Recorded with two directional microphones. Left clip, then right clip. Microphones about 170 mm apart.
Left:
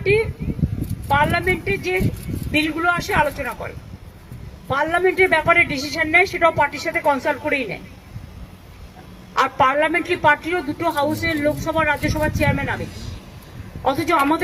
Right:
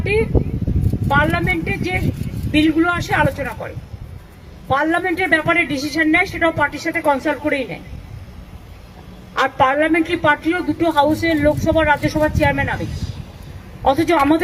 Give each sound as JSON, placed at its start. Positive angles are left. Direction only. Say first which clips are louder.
{"t": 0.0, "sound": "a man's voice", "louder": "even", "side_deg": 30}
{"t": 4.7, "sound": "a man's voice", "louder": "right 1 dB", "side_deg": 25}
{"t": 9.3, "sound": "a man's voice", "louder": "right 1 dB", "side_deg": 25}
{"t": 12.8, "sound": "speech", "louder": "right 3 dB", "side_deg": -25}
{"t": 13.8, "sound": "a man's voice", "louder": "right 3 dB", "side_deg": 25}